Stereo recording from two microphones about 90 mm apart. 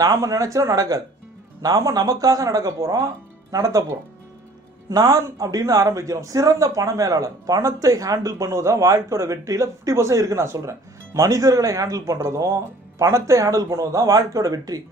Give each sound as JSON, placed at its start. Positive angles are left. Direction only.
{"t": 0.0, "sound": "a man's voice", "side_deg": -40}
{"t": 4.9, "sound": "a man's voice", "side_deg": -40}